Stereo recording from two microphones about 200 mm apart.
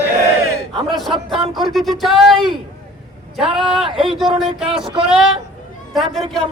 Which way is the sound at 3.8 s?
25° right (ahead or behind).